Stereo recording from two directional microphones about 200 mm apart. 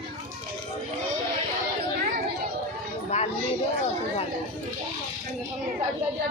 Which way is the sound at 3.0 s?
35° left (ahead or behind).